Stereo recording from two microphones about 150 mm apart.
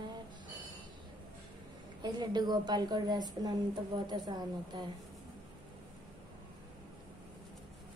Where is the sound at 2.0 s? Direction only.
30° right (ahead or behind).